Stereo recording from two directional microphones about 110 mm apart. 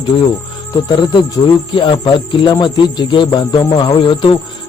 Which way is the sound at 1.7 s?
50° left (ahead or behind).